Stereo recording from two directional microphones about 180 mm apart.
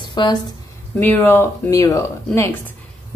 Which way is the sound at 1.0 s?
10° left (ahead or behind).